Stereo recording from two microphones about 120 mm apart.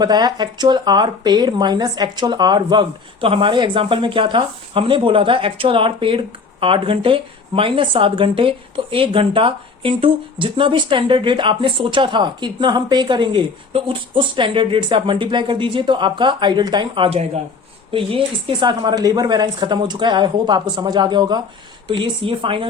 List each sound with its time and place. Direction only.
0.0 s speech: 35° right (ahead or behind)